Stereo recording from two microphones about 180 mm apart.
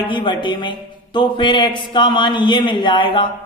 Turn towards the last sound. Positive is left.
turn(degrees=25)  # may be behind; listen again after turning